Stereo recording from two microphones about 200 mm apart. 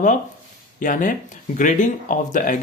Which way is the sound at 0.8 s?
40° left (ahead or behind).